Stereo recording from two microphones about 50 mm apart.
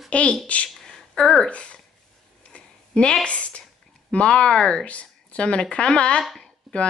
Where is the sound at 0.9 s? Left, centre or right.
Centre.